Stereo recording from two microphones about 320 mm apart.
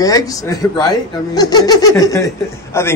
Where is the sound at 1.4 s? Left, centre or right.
Centre.